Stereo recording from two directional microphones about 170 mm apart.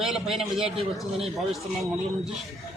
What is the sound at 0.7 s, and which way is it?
Speech, 35° right (ahead or behind).